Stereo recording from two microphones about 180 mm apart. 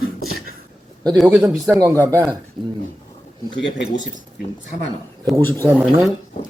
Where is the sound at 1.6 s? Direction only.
20° right (ahead or behind).